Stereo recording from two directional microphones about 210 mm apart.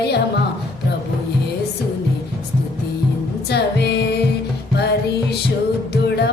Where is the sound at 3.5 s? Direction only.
50° left (ahead or behind).